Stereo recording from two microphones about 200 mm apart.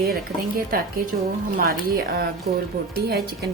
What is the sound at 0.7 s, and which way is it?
A woman's voice, 45° right (ahead or behind).